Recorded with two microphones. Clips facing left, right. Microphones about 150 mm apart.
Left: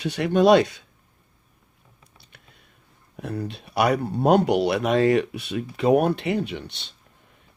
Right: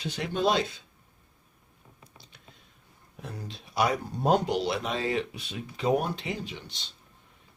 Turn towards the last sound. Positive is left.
turn(degrees=65)  # may be behind; listen again after turning